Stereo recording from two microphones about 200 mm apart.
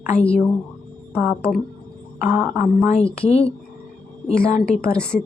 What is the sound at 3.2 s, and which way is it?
Speech, 30° left (ahead or behind).